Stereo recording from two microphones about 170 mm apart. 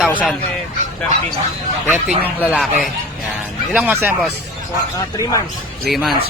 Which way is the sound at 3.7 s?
10° right (ahead or behind).